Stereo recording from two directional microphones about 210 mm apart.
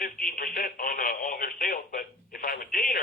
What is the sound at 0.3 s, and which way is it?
Telephone, 45° left (ahead or behind).